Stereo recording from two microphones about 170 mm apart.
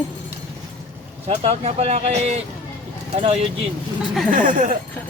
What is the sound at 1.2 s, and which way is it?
Speech, 35° right (ahead or behind).